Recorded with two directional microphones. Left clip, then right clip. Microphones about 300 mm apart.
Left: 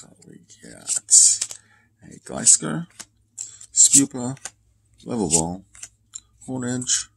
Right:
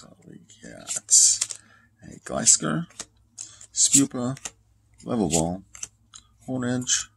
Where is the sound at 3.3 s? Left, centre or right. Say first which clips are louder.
Left 12 dB; centre.